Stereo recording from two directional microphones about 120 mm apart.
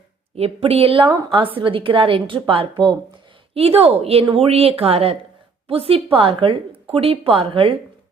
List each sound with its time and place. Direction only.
0.3 s a woman's voice: 55° right (ahead or behind)